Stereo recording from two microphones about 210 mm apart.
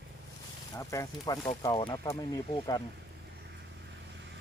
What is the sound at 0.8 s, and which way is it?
Speech, 15° left (ahead or behind).